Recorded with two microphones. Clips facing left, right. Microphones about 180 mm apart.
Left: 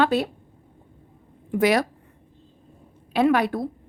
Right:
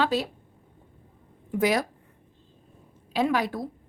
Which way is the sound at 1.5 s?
70° left (ahead or behind).